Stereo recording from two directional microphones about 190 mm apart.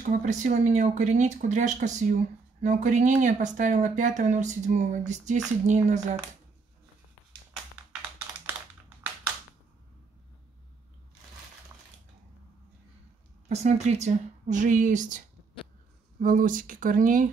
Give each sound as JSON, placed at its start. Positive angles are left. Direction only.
{"t": 0.2, "sound": "speech", "side_deg": -40}
{"t": 13.5, "sound": "speech", "side_deg": -35}